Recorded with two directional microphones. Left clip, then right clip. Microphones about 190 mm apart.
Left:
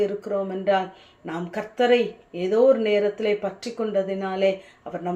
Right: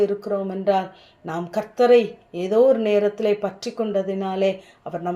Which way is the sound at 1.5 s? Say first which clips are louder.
Right 4 dB; 35° right (ahead or behind).